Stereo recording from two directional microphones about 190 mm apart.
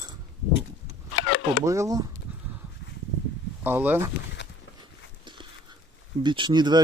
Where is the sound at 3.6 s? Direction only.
10° right (ahead or behind).